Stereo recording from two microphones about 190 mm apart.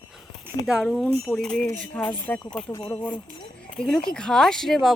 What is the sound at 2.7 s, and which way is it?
Speech, 20° left (ahead or behind).